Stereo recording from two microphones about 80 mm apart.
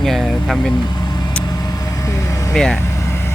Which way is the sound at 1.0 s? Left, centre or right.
Left.